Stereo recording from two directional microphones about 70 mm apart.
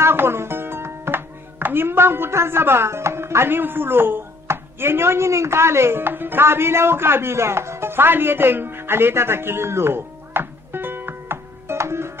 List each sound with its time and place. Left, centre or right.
0.0 s speech: right